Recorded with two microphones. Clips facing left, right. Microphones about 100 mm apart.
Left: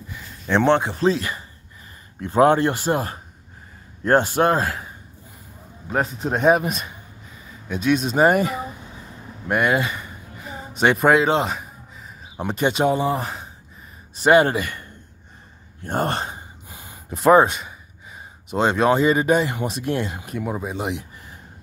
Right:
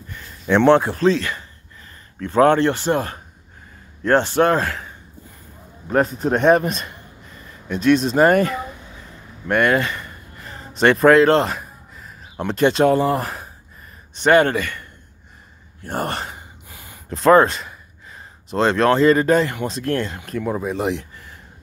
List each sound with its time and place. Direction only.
0.1 s speech: 5° left (ahead or behind)
2.1 s speech: 20° left (ahead or behind)
2.9 s speech: 30° left (ahead or behind)
4.4 s a man's voice: 30° left (ahead or behind)
5.9 s speech: centre (ahead or behind)
9.5 s a sound: 5° left (ahead or behind)
14.2 s speech: 15° left (ahead or behind)
15.9 s a sound: 25° left (ahead or behind)
17.1 s speech: 10° left (ahead or behind)